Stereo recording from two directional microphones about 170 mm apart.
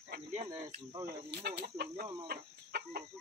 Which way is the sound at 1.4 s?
75° right (ahead or behind).